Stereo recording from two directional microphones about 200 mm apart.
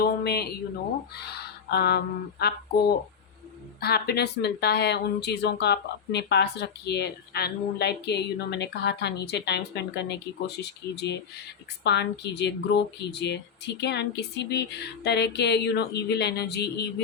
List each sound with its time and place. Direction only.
0.0 s speech: 50° left (ahead or behind)
1.2 s a sound: 55° left (ahead or behind)
2.4 s speech: 55° left (ahead or behind)
3.8 s speech: 50° left (ahead or behind)